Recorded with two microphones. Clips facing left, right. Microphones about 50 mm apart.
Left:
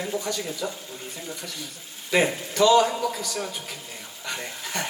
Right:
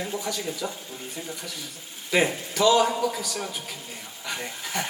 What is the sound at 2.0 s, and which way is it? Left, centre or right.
A man's voice, centre.